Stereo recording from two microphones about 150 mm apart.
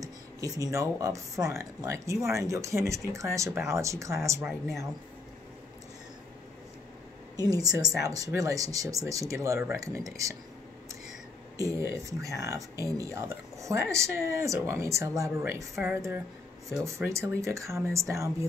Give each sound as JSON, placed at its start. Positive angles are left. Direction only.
{"t": 0.0, "sound": "speech", "side_deg": -20}
{"t": 4.5, "sound": "speech", "side_deg": 0}
{"t": 7.3, "sound": "speech", "side_deg": -25}
{"t": 11.5, "sound": "speech", "side_deg": -20}